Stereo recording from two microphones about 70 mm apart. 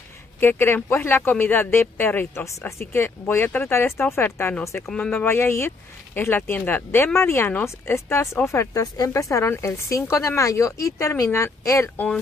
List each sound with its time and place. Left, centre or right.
0.4 s speech: left